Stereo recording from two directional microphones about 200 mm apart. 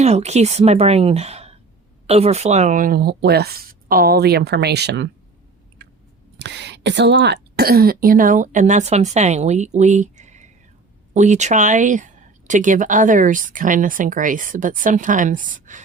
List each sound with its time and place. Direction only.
0.0 s speech: 35° right (ahead or behind); by 5.0 s 55° right (ahead or behind)
6.4 s speech: 60° right (ahead or behind); by 15.8 s 40° right (ahead or behind)